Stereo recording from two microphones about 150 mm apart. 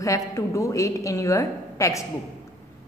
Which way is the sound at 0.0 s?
20° left (ahead or behind).